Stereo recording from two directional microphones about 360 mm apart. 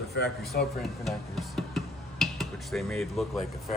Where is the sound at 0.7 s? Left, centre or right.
Centre.